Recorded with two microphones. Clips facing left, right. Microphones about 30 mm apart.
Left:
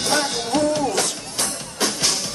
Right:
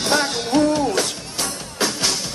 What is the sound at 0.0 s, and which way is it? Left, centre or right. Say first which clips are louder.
Music: right 2 dB; centre.